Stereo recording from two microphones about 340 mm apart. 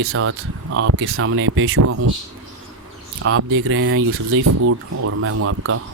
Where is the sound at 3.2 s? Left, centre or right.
Right.